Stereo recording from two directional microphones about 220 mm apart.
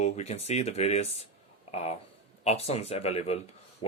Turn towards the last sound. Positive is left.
turn(degrees=30)  # may be behind; listen again after turning